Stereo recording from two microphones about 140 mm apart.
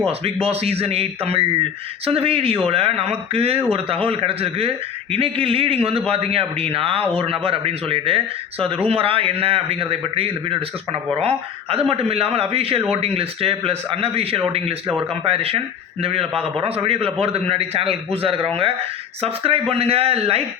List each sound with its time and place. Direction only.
0.0 s a man's voice: 45° right (ahead or behind)